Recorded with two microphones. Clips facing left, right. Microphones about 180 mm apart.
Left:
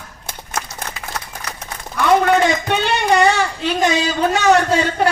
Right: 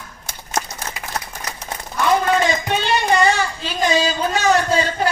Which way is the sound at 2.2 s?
60° left (ahead or behind).